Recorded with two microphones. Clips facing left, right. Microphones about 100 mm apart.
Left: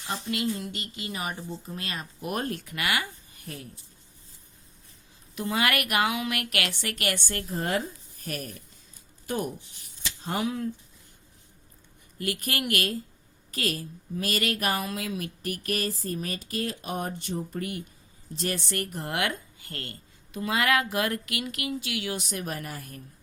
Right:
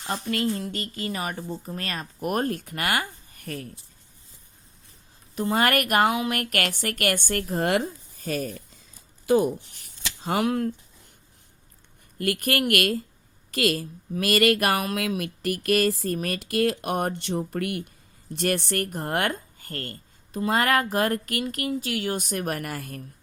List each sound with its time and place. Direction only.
0.3 s a woman's voice: 50° right (ahead or behind)
5.3 s a woman's voice: 40° right (ahead or behind); by 8.3 s 85° right
9.3 s speech: 90° right
10.0 s scissors: 70° right (ahead or behind)
12.2 s speech: 55° right (ahead or behind)
13.5 s speech: 90° right; by 17.8 s 75° right (ahead or behind)
18.3 s a woman's voice: 60° right (ahead or behind); by 23.0 s 85° right